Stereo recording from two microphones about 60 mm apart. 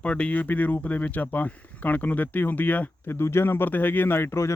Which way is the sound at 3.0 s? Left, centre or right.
Left.